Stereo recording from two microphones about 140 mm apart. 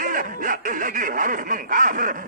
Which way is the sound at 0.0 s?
80° right.